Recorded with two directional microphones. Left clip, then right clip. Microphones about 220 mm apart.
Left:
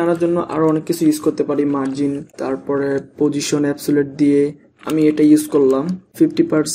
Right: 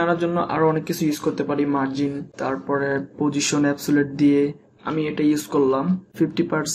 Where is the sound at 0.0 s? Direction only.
20° left (ahead or behind).